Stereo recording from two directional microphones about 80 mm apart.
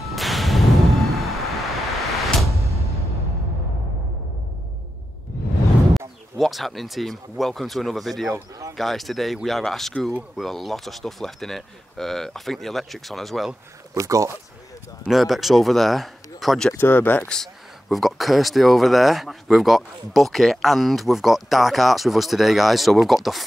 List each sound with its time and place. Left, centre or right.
0.1 s a sound: centre
5.9 s speech: centre
13.9 s speech: right
15.0 s speech: centre
16.7 s speech: left
17.3 s speech: centre